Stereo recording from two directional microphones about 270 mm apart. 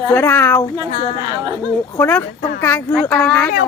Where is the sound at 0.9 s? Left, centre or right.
Left.